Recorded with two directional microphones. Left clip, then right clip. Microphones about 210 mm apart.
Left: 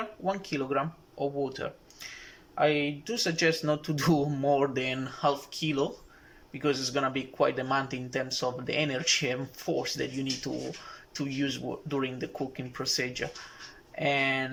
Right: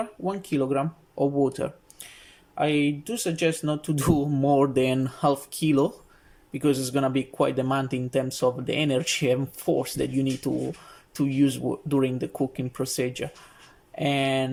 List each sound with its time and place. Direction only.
0.0 s speech: 15° right (ahead or behind)